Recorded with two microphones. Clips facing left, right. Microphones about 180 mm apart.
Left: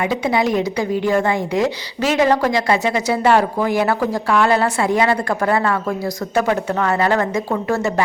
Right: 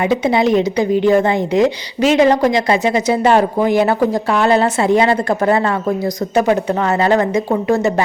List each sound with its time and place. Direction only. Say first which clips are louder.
0.0 s a woman's voice: right 4 dB; 25° right (ahead or behind)